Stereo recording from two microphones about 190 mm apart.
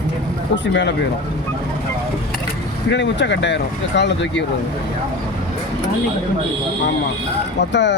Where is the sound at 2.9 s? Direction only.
65° left (ahead or behind).